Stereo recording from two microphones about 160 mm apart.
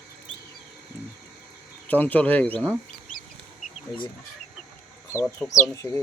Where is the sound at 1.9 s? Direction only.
10° left (ahead or behind).